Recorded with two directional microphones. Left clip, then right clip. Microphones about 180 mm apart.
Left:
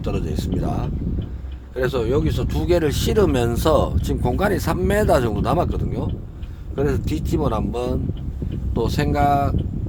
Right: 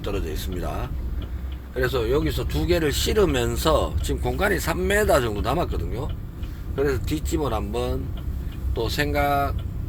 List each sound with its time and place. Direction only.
0.0 s speech: 40° left (ahead or behind)
1.7 s speech: 50° left (ahead or behind)